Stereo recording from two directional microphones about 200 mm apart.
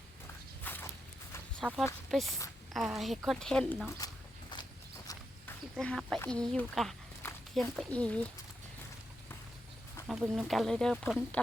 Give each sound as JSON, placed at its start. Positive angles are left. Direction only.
{"t": 0.6, "sound": "walk", "side_deg": 10}
{"t": 1.6, "sound": "speech", "side_deg": -5}
{"t": 4.5, "sound": "walk", "side_deg": 20}
{"t": 5.7, "sound": "speech", "side_deg": 0}
{"t": 10.1, "sound": "speech", "side_deg": 0}